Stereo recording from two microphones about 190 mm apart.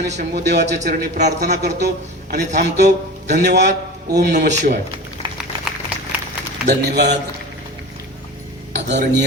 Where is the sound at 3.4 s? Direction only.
65° right (ahead or behind).